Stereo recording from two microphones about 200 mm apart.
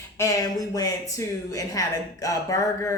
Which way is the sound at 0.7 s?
15° left (ahead or behind).